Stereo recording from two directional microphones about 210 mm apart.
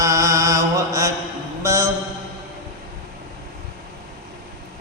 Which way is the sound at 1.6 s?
15° right (ahead or behind).